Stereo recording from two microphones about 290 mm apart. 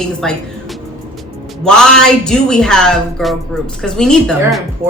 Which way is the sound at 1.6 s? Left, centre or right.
Centre.